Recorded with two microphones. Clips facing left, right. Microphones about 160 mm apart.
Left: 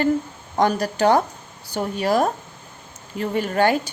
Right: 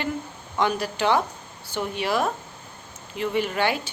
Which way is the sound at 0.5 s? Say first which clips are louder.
Left 4 dB; 40° left (ahead or behind).